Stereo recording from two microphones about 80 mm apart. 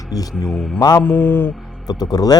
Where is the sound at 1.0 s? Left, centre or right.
Left.